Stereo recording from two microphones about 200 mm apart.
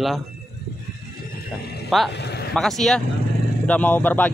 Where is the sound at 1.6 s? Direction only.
55° left (ahead or behind).